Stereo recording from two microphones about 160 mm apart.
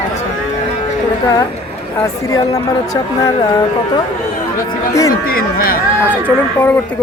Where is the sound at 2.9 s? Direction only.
25° left (ahead or behind).